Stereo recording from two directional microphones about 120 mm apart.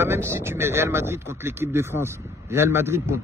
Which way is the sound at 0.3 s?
20° right (ahead or behind).